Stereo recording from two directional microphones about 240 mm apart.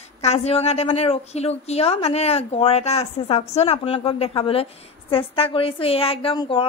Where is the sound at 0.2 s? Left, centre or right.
Left.